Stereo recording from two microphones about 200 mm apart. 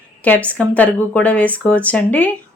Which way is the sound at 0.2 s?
5° left (ahead or behind).